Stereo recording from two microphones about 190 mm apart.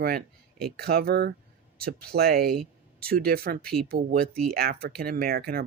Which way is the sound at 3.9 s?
55° right (ahead or behind).